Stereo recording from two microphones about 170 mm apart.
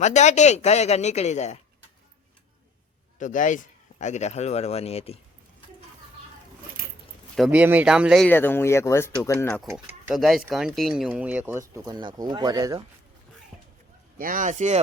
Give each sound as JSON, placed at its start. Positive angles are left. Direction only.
{"t": 0.0, "sound": "speech", "side_deg": 45}
{"t": 3.2, "sound": "speech", "side_deg": 50}
{"t": 7.3, "sound": "speech", "side_deg": -5}
{"t": 8.3, "sound": "speech", "side_deg": 10}
{"t": 9.7, "sound": "speech", "side_deg": -5}
{"t": 14.2, "sound": "speech", "side_deg": -55}